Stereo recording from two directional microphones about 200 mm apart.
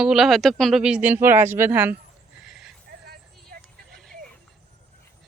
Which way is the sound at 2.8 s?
50° right (ahead or behind).